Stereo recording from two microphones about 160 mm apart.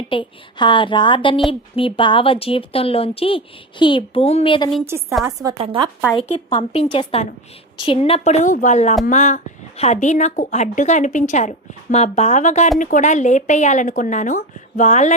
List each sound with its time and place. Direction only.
0.1 s a woman's voice: 30° left (ahead or behind)
4.9 s a woman's voice: 15° right (ahead or behind)
5.5 s a woman's voice: 35° right (ahead or behind)
6.1 s a woman's voice: 35° left (ahead or behind)